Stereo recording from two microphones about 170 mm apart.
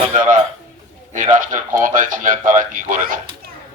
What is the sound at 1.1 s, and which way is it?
A man's voice, 45° right (ahead or behind).